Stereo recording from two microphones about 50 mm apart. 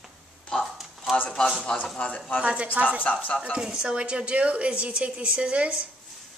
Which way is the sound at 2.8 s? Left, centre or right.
Right.